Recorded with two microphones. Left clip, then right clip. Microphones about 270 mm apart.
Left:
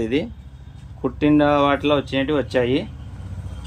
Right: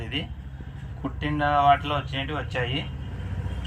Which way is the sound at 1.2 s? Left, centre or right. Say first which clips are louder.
Left 5 dB; left.